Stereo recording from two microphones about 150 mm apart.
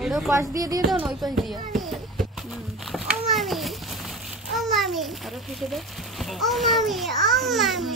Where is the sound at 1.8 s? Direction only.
Centre (ahead or behind).